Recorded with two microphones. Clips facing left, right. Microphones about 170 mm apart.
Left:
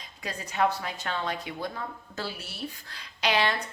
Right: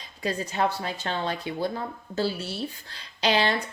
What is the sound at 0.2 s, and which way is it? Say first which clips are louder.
Speech: right 2 dB; 30° right (ahead or behind).